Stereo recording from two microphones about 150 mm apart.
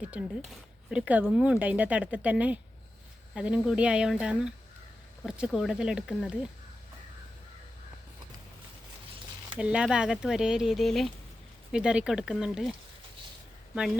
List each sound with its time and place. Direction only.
0.0 s speech: 10° right (ahead or behind)
9.6 s speech: 5° right (ahead or behind)
13.7 s speech: 5° right (ahead or behind)